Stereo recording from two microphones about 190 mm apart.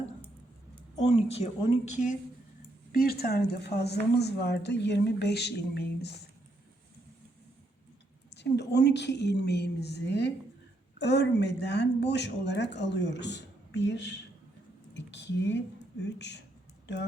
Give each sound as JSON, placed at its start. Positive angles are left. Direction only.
{"t": 1.0, "sound": "speech", "side_deg": 35}
{"t": 2.9, "sound": "speech", "side_deg": 50}
{"t": 8.4, "sound": "speech", "side_deg": 60}
{"t": 14.9, "sound": "squish", "side_deg": 70}
{"t": 16.0, "sound": "speech", "side_deg": 65}